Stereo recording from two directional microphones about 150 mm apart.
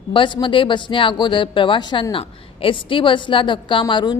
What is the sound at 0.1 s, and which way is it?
Speech, 30° left (ahead or behind).